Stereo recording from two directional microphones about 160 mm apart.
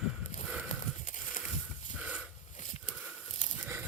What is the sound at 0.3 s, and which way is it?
Horse, 50° left (ahead or behind).